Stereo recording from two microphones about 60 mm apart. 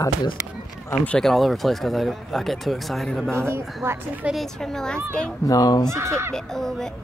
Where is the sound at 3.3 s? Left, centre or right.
Right.